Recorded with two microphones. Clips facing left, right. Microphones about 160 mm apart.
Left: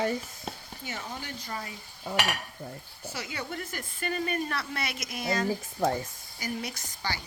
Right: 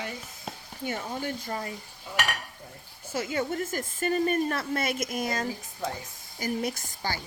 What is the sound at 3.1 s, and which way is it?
A woman's voice, 45° right (ahead or behind).